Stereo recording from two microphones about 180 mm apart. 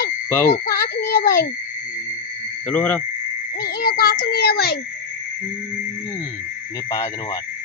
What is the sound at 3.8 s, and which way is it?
Speech, 55° left (ahead or behind).